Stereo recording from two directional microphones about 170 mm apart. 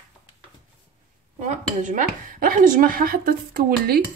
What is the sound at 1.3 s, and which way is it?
Speech, 45° right (ahead or behind).